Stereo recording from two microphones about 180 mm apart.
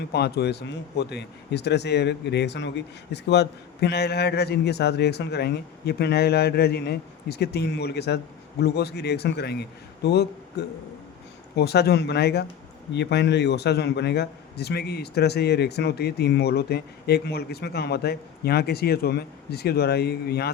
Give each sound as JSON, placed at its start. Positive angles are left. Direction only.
{"t": 0.1, "sound": "speech", "side_deg": 65}